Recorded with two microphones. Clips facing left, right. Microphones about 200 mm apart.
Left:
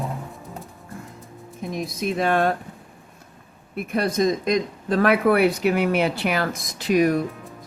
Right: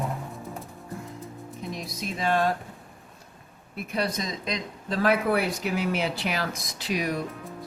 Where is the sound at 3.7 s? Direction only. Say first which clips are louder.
Left 7 dB; 50° left (ahead or behind).